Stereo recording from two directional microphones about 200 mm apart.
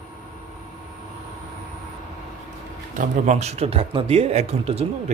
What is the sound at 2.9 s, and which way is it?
Speech, 35° right (ahead or behind).